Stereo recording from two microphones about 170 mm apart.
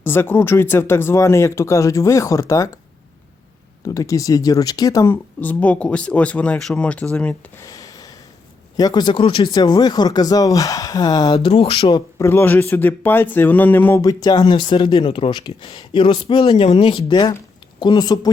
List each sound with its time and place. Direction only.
0.0 s speech: 10° left (ahead or behind)
3.8 s speech: 20° left (ahead or behind)
5.4 s speech: 10° left (ahead or behind)
7.6 s a sound: 20° left (ahead or behind)
8.7 s speech: 20° left (ahead or behind)
11.3 s speech: 35° left (ahead or behind)
12.2 s speech: 15° left (ahead or behind)